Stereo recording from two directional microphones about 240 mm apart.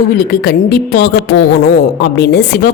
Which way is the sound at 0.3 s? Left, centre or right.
Left.